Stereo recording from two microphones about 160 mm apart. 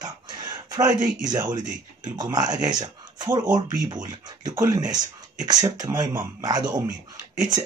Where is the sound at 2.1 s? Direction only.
25° right (ahead or behind).